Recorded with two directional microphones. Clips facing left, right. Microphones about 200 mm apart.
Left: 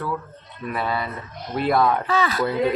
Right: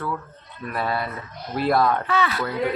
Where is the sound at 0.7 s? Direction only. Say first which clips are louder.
Even; centre (ahead or behind).